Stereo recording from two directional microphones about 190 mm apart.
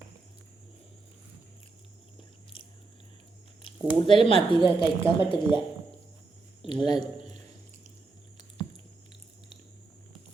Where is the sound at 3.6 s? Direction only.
25° left (ahead or behind).